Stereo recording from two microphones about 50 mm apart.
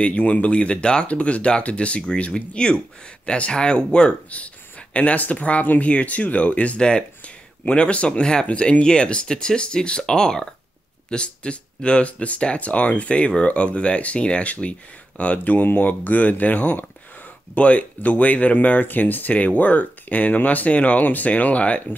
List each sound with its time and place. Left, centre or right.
0.0 s speech: left
15.3 s speech: left